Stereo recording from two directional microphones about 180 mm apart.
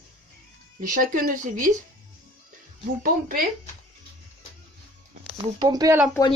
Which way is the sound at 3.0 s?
50° right (ahead or behind).